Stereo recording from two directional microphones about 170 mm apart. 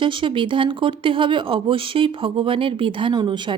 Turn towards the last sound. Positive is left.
turn(degrees=-25)  # may be behind; listen again after turning